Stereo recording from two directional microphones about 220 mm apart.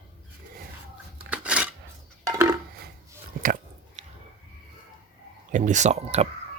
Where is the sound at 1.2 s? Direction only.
5° right (ahead or behind).